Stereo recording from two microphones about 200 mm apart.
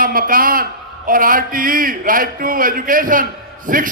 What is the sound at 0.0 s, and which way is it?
A man's voice, 45° right (ahead or behind).